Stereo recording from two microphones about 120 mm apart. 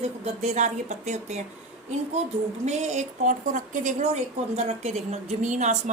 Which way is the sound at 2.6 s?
70° right (ahead or behind).